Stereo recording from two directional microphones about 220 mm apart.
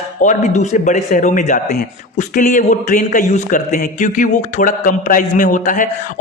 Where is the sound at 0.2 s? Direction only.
35° left (ahead or behind).